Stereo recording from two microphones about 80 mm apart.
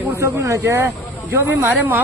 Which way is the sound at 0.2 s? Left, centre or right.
Right.